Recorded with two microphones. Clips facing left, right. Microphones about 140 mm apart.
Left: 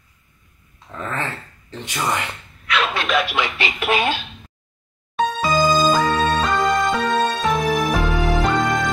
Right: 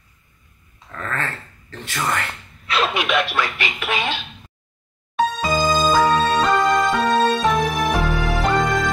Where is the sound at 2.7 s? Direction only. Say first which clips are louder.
Even; 30° right (ahead or behind).